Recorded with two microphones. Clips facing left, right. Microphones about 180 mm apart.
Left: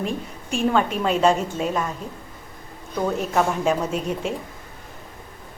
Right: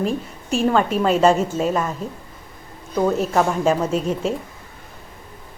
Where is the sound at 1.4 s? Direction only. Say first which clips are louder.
Right 4 dB; 40° right (ahead or behind).